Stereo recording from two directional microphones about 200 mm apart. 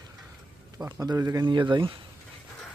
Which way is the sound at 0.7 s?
20° right (ahead or behind).